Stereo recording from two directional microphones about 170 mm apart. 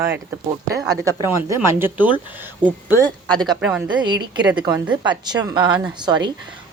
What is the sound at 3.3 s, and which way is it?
Speech, centre (ahead or behind).